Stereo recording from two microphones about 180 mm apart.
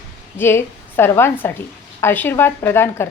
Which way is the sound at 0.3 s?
10° left (ahead or behind).